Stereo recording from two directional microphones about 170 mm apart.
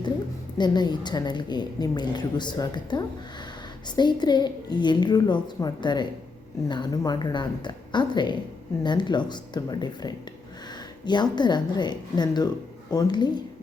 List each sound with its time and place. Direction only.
0.6 s a woman's voice: 25° left (ahead or behind)